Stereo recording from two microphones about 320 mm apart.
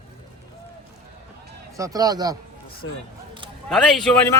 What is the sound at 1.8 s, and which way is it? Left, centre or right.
Speech, centre.